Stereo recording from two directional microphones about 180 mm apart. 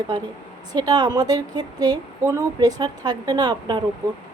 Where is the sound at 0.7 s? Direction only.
20° right (ahead or behind).